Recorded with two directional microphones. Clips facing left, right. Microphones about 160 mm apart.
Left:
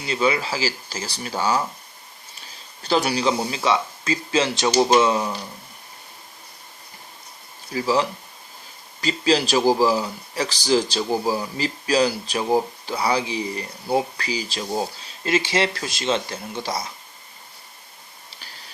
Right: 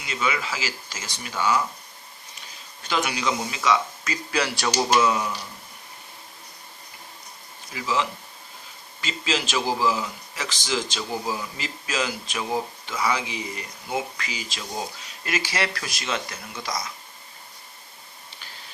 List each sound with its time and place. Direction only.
0.0 s speech: 30° left (ahead or behind)
2.8 s speech: 35° left (ahead or behind)
7.7 s speech: 35° left (ahead or behind)